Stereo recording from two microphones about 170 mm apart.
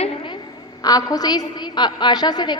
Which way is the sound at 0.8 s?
20° left (ahead or behind).